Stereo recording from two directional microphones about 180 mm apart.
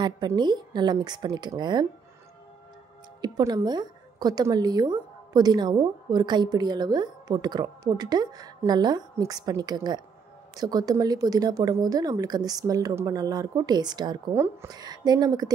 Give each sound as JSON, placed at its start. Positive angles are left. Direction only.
{"t": 0.0, "sound": "a woman's voice", "side_deg": -25}
{"t": 3.2, "sound": "a woman's voice", "side_deg": -20}